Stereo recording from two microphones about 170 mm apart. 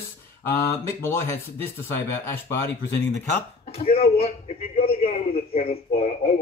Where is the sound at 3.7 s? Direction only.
35° left (ahead or behind).